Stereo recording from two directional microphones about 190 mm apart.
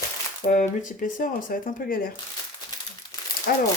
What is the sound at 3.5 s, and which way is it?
Speech, 45° left (ahead or behind).